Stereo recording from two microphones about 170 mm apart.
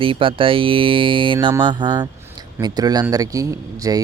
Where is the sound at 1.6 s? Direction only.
25° right (ahead or behind).